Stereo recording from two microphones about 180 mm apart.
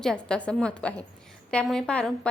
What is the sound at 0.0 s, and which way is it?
A woman's voice, 5° left (ahead or behind).